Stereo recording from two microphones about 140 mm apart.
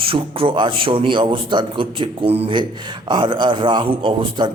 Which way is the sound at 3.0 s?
35° right (ahead or behind).